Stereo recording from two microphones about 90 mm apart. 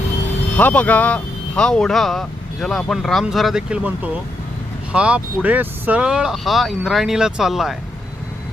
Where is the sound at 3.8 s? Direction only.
15° right (ahead or behind).